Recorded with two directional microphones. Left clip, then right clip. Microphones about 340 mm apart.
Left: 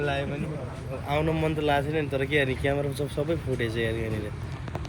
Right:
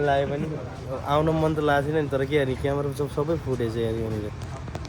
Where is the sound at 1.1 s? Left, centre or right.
Centre.